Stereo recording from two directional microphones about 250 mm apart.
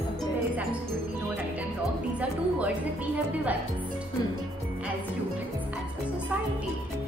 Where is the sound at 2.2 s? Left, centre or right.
Centre.